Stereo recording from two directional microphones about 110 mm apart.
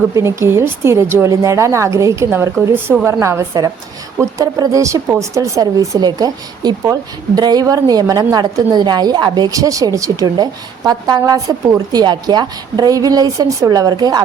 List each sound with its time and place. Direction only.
0.1 s a woman's voice: 25° right (ahead or behind)